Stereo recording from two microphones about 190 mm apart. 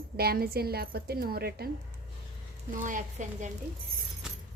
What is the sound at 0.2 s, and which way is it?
A woman's voice, 55° right (ahead or behind).